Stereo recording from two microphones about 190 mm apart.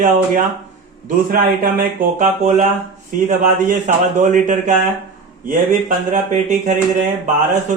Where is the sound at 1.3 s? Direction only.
50° right (ahead or behind).